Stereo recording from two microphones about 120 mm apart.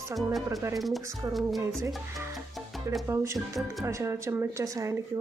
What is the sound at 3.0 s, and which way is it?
A woman's voice, 20° right (ahead or behind).